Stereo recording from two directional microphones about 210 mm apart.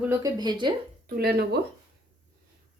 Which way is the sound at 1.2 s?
50° right (ahead or behind).